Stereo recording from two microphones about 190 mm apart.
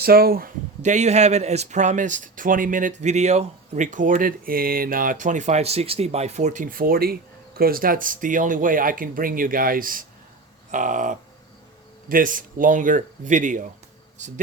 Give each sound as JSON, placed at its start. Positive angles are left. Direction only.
{"t": 0.0, "sound": "a man's voice", "side_deg": -55}